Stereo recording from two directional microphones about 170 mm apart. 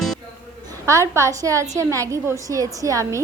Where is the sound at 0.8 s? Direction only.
15° right (ahead or behind).